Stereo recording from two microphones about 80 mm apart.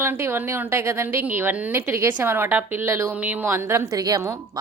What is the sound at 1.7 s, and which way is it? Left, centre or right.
A woman's voice, right.